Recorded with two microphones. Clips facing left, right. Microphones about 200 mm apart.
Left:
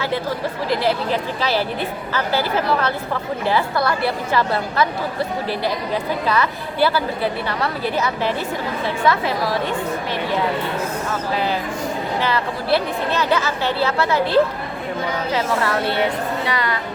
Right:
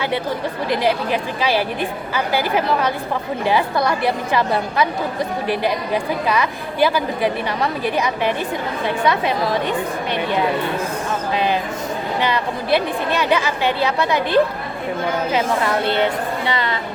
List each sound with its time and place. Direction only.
0.7 s a woman's voice: 15° right (ahead or behind)
12.2 s a woman's voice: 15° right (ahead or behind)